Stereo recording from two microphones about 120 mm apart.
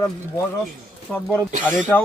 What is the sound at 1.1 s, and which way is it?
Speech, 5° left (ahead or behind).